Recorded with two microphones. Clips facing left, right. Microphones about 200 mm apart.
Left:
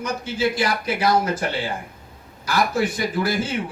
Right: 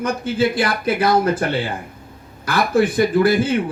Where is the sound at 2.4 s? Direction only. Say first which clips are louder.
Right 4 dB; 55° right (ahead or behind).